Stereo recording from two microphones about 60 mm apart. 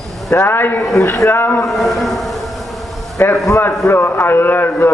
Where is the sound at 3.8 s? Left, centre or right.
Left.